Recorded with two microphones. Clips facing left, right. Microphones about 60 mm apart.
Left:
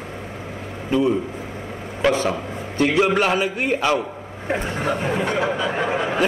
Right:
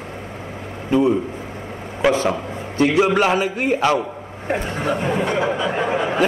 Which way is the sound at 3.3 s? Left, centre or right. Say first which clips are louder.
Right 2 dB; right.